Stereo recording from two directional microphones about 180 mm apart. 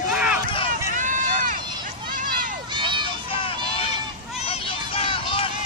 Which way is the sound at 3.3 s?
30° left (ahead or behind).